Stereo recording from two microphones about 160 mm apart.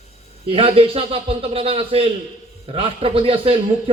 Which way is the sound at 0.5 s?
35° right (ahead or behind).